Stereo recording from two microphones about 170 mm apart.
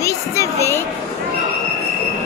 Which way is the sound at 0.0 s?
15° left (ahead or behind).